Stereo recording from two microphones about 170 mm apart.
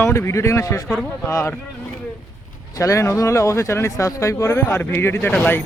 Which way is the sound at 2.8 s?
20° left (ahead or behind).